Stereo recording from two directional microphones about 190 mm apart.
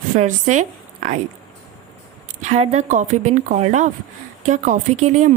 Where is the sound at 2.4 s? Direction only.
35° right (ahead or behind).